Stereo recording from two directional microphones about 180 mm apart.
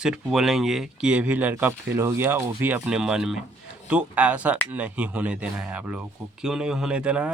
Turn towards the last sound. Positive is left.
turn(degrees=-5)  # may be behind; listen again after turning